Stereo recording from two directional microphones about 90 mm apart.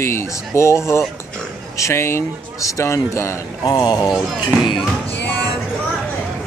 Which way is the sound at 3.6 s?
50° left (ahead or behind).